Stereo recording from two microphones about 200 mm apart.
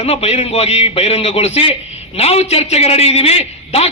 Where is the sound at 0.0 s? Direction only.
30° left (ahead or behind).